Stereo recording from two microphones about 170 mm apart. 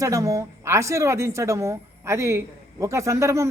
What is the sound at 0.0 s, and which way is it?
A man's voice, 20° right (ahead or behind).